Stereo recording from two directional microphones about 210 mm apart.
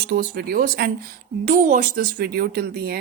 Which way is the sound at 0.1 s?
50° right (ahead or behind).